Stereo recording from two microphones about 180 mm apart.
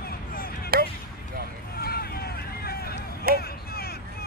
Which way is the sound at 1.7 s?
60° left (ahead or behind).